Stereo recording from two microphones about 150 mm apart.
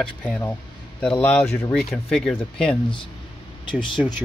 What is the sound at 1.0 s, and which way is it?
Speech, 15° left (ahead or behind).